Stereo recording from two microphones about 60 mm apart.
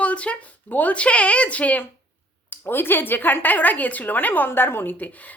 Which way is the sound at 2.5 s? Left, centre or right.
Left.